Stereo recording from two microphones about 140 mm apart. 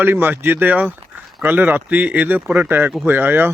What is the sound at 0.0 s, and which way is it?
Speech, 15° right (ahead or behind).